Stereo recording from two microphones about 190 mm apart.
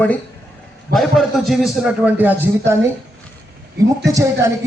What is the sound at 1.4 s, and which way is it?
A man's voice, centre (ahead or behind).